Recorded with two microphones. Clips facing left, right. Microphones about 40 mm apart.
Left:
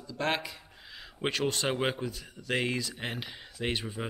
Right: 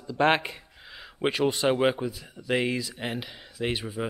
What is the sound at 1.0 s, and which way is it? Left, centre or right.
Speech, centre.